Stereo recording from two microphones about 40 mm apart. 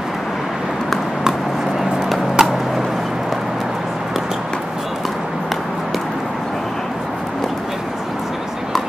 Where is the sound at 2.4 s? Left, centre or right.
Centre.